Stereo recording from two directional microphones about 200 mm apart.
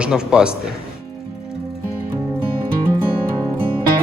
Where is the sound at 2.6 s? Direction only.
20° right (ahead or behind).